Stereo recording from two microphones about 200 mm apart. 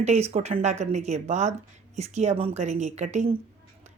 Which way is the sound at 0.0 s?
35° right (ahead or behind).